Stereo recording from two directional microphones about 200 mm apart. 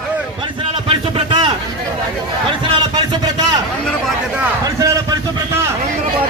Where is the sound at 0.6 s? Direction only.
25° right (ahead or behind).